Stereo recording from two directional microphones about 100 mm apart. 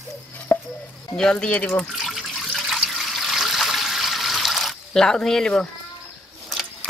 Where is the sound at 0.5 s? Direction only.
15° left (ahead or behind).